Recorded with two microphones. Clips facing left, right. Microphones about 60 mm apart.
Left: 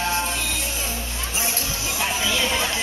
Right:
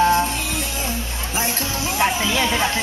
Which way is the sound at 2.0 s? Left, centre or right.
Right.